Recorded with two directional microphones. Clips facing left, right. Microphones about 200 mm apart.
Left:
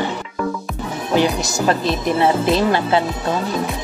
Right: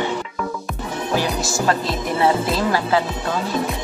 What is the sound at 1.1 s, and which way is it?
Music, 20° left (ahead or behind).